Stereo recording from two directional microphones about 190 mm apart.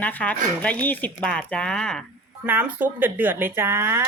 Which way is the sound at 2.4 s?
10° right (ahead or behind).